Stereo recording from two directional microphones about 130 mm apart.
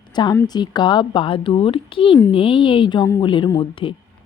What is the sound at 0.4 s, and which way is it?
A woman's voice, 35° left (ahead or behind).